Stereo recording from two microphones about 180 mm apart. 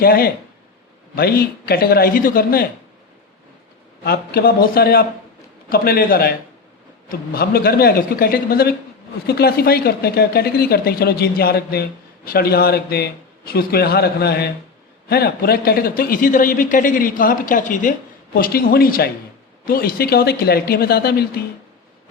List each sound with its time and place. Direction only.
0.0 s speech: 55° left (ahead or behind)
4.0 s a man's voice: 60° left (ahead or behind)